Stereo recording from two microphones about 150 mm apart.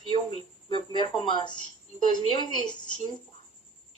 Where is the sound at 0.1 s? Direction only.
35° left (ahead or behind).